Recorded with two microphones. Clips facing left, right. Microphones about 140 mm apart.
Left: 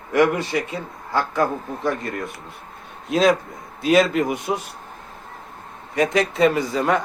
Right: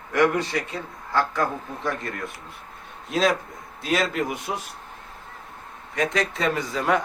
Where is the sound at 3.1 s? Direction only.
Centre (ahead or behind).